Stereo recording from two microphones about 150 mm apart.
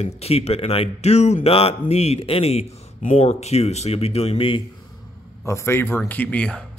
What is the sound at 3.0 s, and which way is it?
Speech, 55° left (ahead or behind).